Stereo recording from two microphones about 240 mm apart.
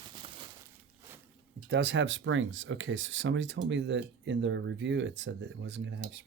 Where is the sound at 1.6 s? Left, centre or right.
Right.